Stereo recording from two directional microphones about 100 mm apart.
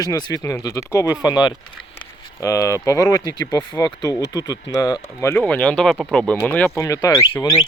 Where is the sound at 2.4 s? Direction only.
30° left (ahead or behind).